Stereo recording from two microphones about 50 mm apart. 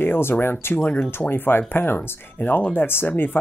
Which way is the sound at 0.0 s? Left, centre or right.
Left.